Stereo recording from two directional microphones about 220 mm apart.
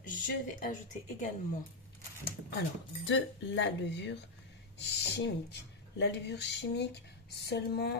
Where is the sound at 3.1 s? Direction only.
55° left (ahead or behind).